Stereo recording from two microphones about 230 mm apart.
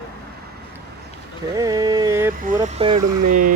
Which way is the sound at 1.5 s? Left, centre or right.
Centre.